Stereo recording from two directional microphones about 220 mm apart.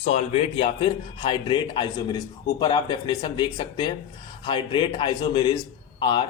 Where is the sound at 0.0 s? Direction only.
30° left (ahead or behind).